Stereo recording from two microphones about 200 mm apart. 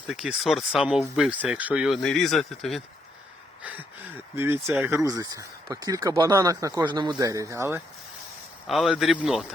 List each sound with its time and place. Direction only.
0.1 s speech: centre (ahead or behind)
3.6 s a sound: 5° right (ahead or behind)
4.4 s speech: 10° right (ahead or behind)
8.6 s speech: centre (ahead or behind)